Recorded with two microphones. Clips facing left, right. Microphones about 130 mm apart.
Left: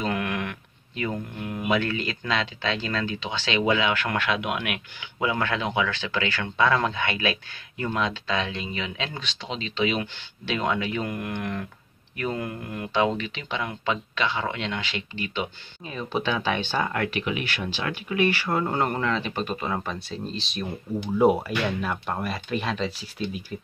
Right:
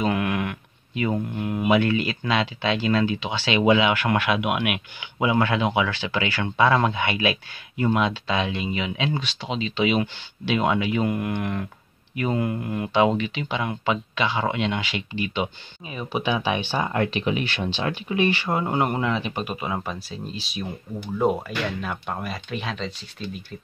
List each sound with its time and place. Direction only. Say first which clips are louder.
0.0 s mantra: right 4 dB; 10° right (ahead or behind)
1.7 s speech: right 5 dB; 15° right (ahead or behind)
21.0 s speech: left 3 dB; 5° left (ahead or behind)